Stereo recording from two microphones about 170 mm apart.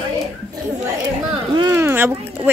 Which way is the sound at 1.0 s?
25° right (ahead or behind).